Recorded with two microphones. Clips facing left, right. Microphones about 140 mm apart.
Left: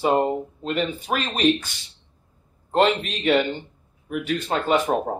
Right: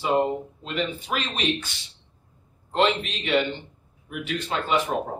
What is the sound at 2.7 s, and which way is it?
Speech, 45° left (ahead or behind).